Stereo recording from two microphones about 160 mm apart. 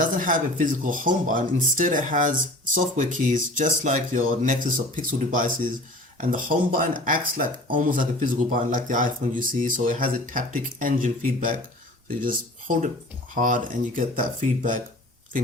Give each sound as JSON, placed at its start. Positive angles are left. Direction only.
{"t": 0.0, "sound": "speech", "side_deg": -55}